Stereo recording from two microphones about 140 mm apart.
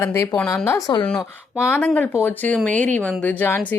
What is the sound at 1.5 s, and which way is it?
Speech, 15° left (ahead or behind).